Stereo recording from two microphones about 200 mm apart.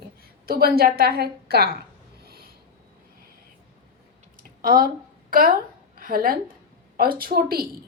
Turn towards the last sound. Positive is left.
turn(degrees=-50)  # may be behind; listen again after turning